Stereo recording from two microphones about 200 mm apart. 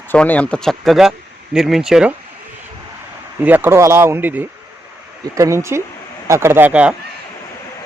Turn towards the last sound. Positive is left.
turn(degrees=-5)  # may be behind; listen again after turning